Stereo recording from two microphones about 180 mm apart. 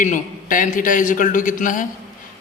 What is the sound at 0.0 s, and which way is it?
A man's voice, 45° left (ahead or behind).